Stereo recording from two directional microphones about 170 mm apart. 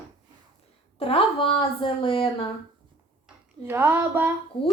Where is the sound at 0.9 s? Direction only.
35° left (ahead or behind).